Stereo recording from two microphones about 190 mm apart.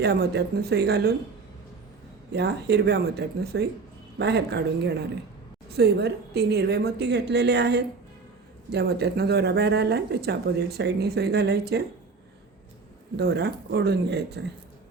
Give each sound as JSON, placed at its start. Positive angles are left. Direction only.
{"t": 0.0, "sound": "speech", "side_deg": -60}
{"t": 2.3, "sound": "speech", "side_deg": -60}
{"t": 13.1, "sound": "speech", "side_deg": -60}